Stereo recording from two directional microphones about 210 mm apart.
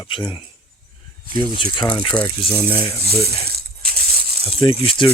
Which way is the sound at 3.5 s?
45° right (ahead or behind).